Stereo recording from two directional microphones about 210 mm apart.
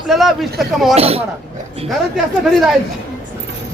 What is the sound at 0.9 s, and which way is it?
Speech, 30° right (ahead or behind).